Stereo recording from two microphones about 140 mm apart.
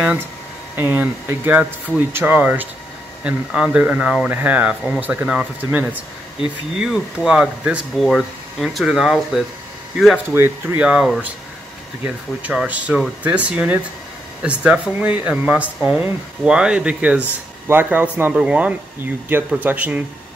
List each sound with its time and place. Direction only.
0.7 s speech: 15° right (ahead or behind)
10.3 s speech: 15° right (ahead or behind)
10.8 s speech: 5° right (ahead or behind)
12.4 s speech: 10° right (ahead or behind)